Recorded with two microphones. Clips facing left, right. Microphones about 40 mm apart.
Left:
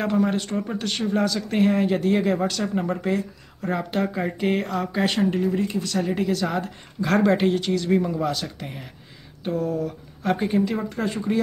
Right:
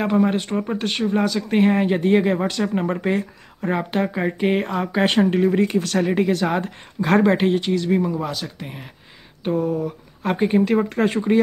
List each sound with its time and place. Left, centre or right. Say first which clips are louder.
0.0 s speech: right 3 dB; right
5.3 s speech: right 5 dB; right
6.1 s speech: right 4 dB; right
7.2 s speech: right 2 dB; centre
9.4 s speech: right 3 dB; right
10.6 s speech: right 6 dB; right